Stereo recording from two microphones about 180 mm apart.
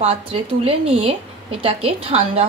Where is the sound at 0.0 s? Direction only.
35° right (ahead or behind).